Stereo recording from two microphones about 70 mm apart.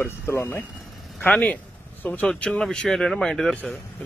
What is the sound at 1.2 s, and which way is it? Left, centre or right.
Speech, left.